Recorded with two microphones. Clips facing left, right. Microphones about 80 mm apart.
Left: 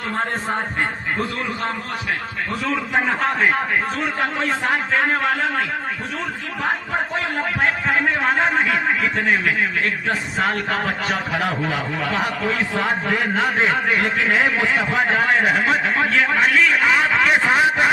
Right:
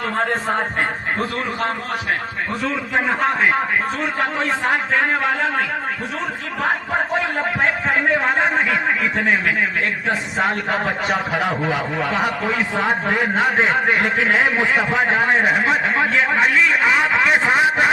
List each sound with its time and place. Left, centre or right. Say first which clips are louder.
3.1 s a man's voice: right 3 dB; centre
4.7 s a man's voice: even; centre
7.3 s a man's voice: right 1 dB; right
10.1 s a man's voice: right 3 dB; right